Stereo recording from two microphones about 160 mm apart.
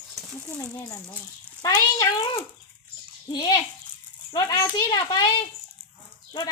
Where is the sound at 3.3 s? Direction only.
25° left (ahead or behind).